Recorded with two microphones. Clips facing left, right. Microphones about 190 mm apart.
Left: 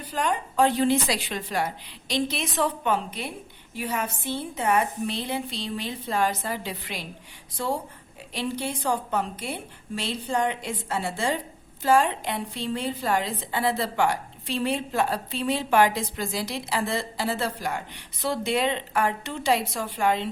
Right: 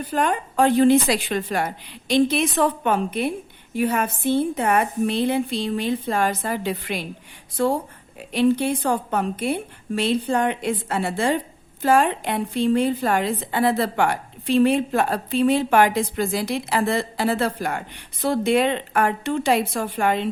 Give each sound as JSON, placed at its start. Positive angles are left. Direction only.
{"t": 0.1, "sound": "a woman's voice", "side_deg": -55}